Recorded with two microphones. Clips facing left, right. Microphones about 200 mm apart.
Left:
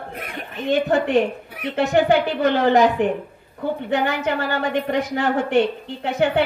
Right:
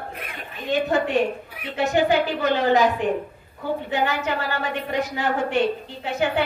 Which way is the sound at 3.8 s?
60° left (ahead or behind).